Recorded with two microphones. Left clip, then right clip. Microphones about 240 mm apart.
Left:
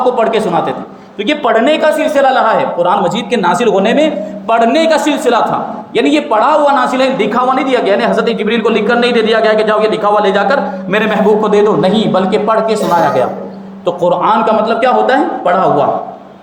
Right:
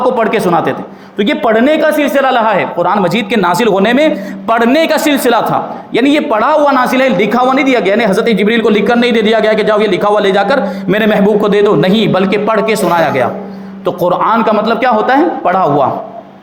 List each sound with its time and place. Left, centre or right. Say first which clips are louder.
0.0 s a woman's voice: even; right